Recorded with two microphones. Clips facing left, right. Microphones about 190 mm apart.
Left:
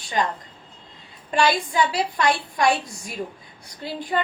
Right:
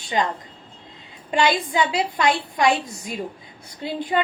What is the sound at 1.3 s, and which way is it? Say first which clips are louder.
A woman's voice: right 1 dB; 20° right (ahead or behind).